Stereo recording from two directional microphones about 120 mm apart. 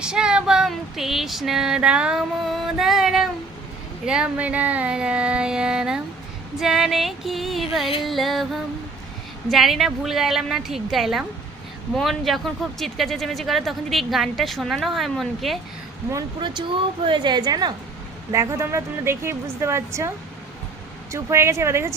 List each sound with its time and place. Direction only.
0.0 s child singing: 5° right (ahead or behind)
4.0 s music: 10° right (ahead or behind)
6.6 s speech: 5° right (ahead or behind)
16.4 s a woman's voice: 40° right (ahead or behind)
18.3 s a woman's voice: 25° right (ahead or behind)